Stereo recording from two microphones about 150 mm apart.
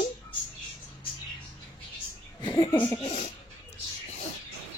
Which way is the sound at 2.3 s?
30° left (ahead or behind).